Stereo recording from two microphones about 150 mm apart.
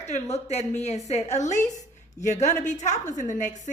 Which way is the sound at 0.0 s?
45° left (ahead or behind).